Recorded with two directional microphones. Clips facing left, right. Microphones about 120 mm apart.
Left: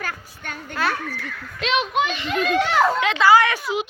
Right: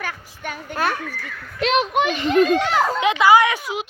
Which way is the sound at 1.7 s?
55° right (ahead or behind).